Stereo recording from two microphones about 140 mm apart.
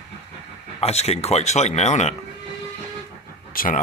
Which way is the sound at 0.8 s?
50° left (ahead or behind).